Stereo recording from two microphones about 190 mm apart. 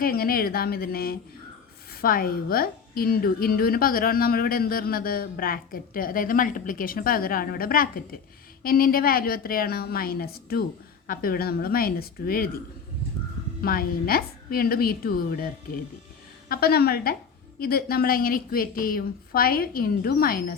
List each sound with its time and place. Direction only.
0.0 s a woman's voice: 50° left (ahead or behind)
13.6 s a woman's voice: 50° left (ahead or behind)